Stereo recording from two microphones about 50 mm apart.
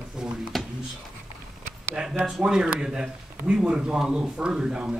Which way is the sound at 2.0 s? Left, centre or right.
Centre.